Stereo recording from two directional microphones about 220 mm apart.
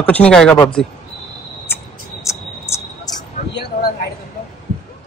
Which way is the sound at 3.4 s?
30° left (ahead or behind).